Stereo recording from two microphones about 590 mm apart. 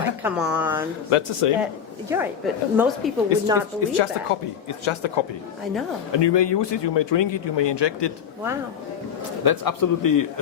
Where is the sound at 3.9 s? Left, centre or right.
Left.